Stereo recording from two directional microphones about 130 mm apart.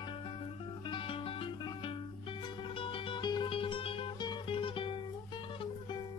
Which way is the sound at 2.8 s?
40° left (ahead or behind).